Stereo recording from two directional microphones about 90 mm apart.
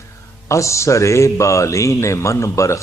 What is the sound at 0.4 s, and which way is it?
Speech, 35° left (ahead or behind).